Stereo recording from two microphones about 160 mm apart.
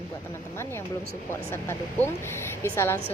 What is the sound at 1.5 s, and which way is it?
Speech, 15° left (ahead or behind).